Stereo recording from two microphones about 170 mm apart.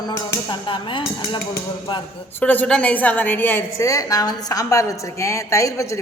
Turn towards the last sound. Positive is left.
turn(degrees=20)  # may be behind; listen again after turning